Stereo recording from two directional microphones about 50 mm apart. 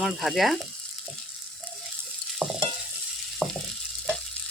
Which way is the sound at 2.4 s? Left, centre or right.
Right.